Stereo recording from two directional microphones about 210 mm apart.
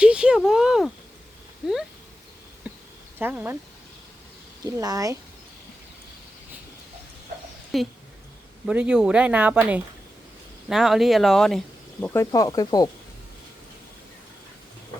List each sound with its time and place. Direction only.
0.0 s a sound: 5° right (ahead or behind)
2.6 s insect: 5° right (ahead or behind)
3.2 s speech: 10° right (ahead or behind)
4.6 s speech: 15° right (ahead or behind)
7.7 s speech: centre (ahead or behind)
12.0 s speech: 15° left (ahead or behind)